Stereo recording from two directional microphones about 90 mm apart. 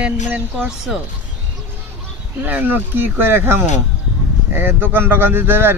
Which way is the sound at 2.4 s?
20° right (ahead or behind).